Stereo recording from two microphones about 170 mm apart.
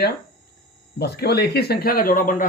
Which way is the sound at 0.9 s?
70° left (ahead or behind).